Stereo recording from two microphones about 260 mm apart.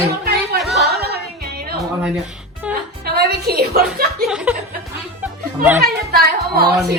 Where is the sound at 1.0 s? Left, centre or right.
Right.